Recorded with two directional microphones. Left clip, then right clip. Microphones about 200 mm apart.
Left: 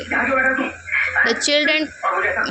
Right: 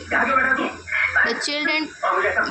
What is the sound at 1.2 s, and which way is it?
Speech, 20° left (ahead or behind).